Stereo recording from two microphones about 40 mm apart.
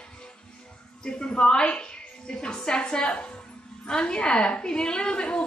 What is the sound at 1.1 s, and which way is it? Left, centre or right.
A woman's voice, left.